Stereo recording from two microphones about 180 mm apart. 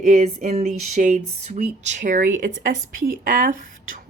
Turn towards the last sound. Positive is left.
turn(degrees=-45)  # may be behind; listen again after turning